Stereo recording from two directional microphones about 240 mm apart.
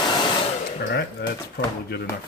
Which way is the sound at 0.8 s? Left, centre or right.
Left.